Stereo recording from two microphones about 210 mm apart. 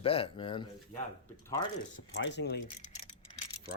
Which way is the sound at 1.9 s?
60° left (ahead or behind).